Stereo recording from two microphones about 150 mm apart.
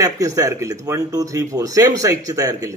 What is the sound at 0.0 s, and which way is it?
A man's voice, 20° right (ahead or behind).